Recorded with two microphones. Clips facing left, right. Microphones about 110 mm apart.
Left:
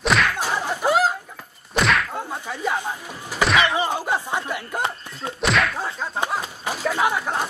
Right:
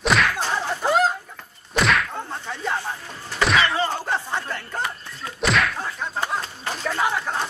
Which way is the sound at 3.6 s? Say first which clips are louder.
Left 1 dB; 15° left (ahead or behind).